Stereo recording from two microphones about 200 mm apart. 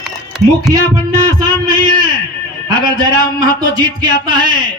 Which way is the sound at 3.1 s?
20° right (ahead or behind).